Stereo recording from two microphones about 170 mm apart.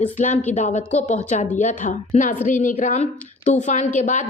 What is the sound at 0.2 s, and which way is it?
A woman's voice, 45° left (ahead or behind).